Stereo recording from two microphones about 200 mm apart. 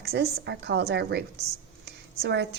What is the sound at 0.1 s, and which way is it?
A woman's voice, 55° right (ahead or behind).